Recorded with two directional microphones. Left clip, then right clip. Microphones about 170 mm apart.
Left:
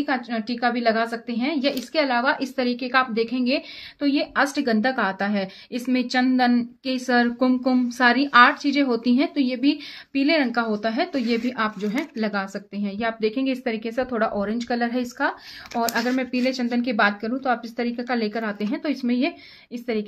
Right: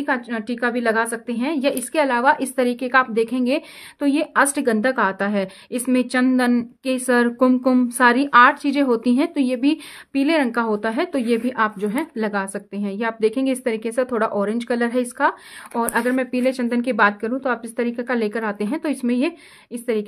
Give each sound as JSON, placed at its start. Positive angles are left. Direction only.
{"t": 0.0, "sound": "a woman's voice", "side_deg": -45}